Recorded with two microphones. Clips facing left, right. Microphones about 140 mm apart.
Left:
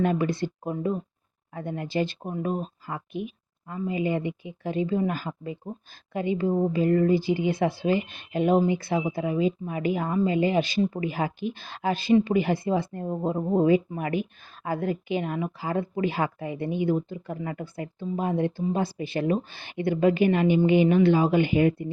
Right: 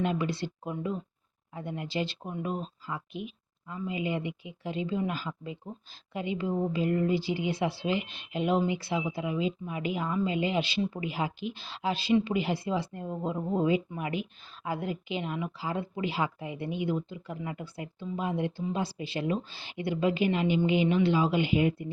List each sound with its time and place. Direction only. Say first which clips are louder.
0.0 s speech: left 5 dB; 50° left (ahead or behind)